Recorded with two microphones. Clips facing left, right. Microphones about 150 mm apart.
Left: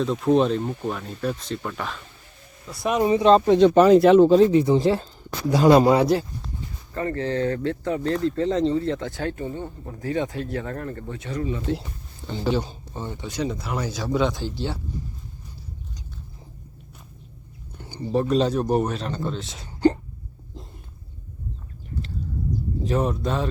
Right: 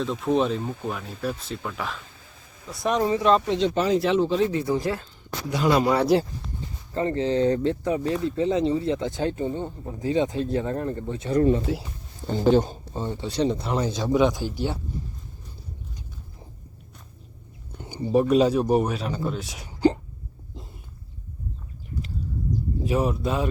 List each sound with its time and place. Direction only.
0.0 s speech: centre (ahead or behind)
3.0 s speech: 15° left (ahead or behind)
3.4 s speech: 50° left (ahead or behind)
4.5 s speech: 25° left (ahead or behind)
5.5 s speech: 40° left (ahead or behind)
6.9 s speech: 20° right (ahead or behind)
11.7 s speech: 5° right (ahead or behind)
12.5 s speech: 45° right (ahead or behind)
12.9 s speech: 25° right (ahead or behind)
17.7 s speech: 20° right (ahead or behind)
22.8 s speech: 10° right (ahead or behind)